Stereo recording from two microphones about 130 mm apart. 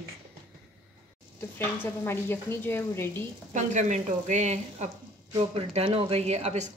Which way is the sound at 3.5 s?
65° right (ahead or behind).